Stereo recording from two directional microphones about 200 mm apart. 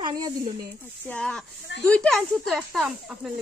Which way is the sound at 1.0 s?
5° left (ahead or behind).